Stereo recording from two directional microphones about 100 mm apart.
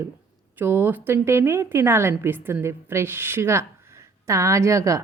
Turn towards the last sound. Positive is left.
turn(degrees=-30)  # may be behind; listen again after turning